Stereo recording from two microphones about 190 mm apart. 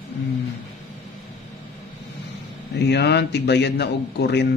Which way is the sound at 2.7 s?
60° left (ahead or behind).